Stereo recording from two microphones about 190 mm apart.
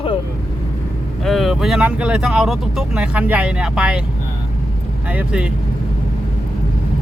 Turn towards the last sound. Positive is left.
turn(degrees=-5)  # may be behind; listen again after turning